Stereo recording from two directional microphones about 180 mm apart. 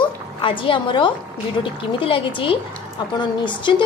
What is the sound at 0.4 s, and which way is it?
A woman's voice, 30° left (ahead or behind).